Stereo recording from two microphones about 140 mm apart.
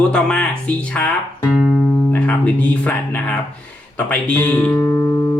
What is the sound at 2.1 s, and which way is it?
Speech, 10° left (ahead or behind).